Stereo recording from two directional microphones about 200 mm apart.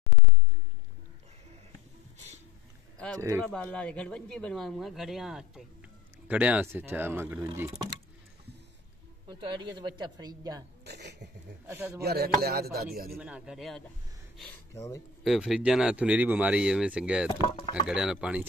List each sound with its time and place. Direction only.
3.2 s speech: 15° right (ahead or behind)
3.4 s speech: 5° left (ahead or behind); by 7.4 s 10° right (ahead or behind)
9.3 s speech: 25° right (ahead or behind)
10.9 s a sound: 55° right (ahead or behind)
11.6 s speech: 10° right (ahead or behind)
12.0 s chopping: 50° right (ahead or behind)
13.1 s speech: 5° right (ahead or behind)
15.2 s speech: centre (ahead or behind)
17.4 s speech: 20° left (ahead or behind)
17.8 s speech: 5° right (ahead or behind)